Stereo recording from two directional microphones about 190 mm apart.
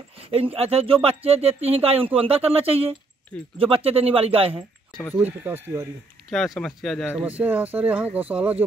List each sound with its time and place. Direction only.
0.2 s speech: 30° right (ahead or behind)
5.1 s speech: 10° right (ahead or behind)
6.3 s speech: centre (ahead or behind)
7.2 s speech: 10° right (ahead or behind)